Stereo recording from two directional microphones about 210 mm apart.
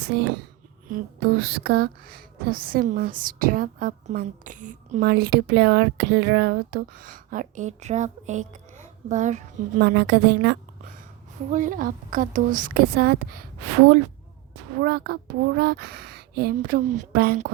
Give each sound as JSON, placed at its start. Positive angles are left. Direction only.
{"t": 0.1, "sound": "a woman's voice", "side_deg": -50}
{"t": 9.8, "sound": "a woman's voice", "side_deg": -55}
{"t": 11.4, "sound": "a woman's voice", "side_deg": -40}
{"t": 14.8, "sound": "a woman's voice", "side_deg": -45}